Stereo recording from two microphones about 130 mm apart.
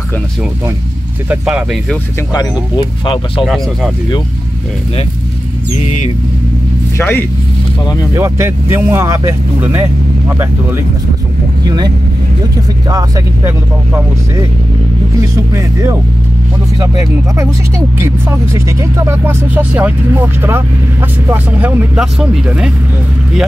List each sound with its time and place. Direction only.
1.3 s speech: 10° right (ahead or behind)
2.3 s speech: 35° left (ahead or behind)
3.4 s speech: 5° right (ahead or behind)
5.8 s a sound: 55° left (ahead or behind)
7.0 s speech: 15° left (ahead or behind)
8.1 s speech: 20° right (ahead or behind)
11.6 s speech: 35° right (ahead or behind)
15.5 s speech: 25° right (ahead or behind)
18.0 s speech: 20° right (ahead or behind); by 22.7 s 5° right (ahead or behind)